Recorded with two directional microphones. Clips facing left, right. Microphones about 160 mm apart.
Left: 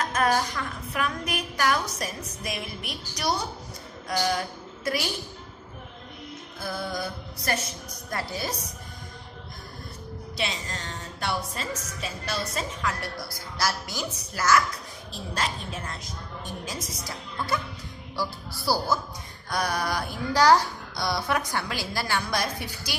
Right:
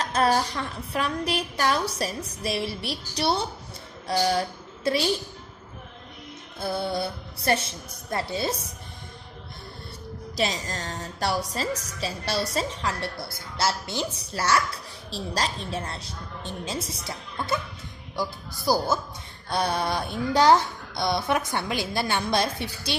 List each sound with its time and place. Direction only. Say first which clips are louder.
0.0 s a woman's voice: right 2 dB; 30° right (ahead or behind)
6.6 s speech: right 4 dB; 30° right (ahead or behind)
10.3 s a woman's voice: right 5 dB; 40° right (ahead or behind)